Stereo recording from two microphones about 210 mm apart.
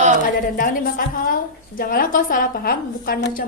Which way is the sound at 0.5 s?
40° left (ahead or behind).